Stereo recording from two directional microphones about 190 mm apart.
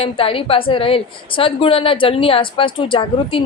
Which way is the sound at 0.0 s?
30° left (ahead or behind).